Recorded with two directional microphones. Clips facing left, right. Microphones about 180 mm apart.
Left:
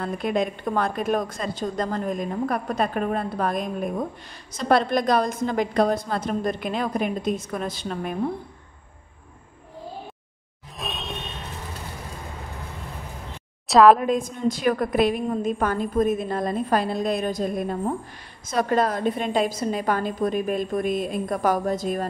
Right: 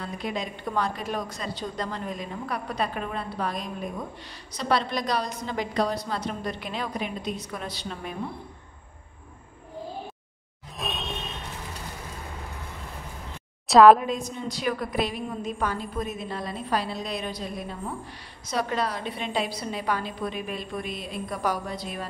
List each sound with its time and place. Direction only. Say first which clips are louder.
0.0 s a woman's voice: left 7 dB; 55° left (ahead or behind)
10.8 s music: even; centre (ahead or behind)
13.7 s a woman's voice: even; centre (ahead or behind)
14.0 s a woman's voice: left 7 dB; 50° left (ahead or behind)